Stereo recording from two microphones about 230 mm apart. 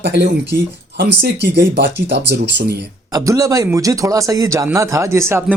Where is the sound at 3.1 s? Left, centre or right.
Centre.